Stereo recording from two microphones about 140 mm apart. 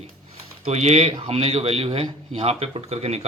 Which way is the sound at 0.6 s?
50° right (ahead or behind).